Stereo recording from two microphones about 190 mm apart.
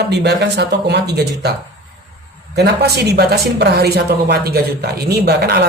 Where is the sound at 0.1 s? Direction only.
60° right (ahead or behind).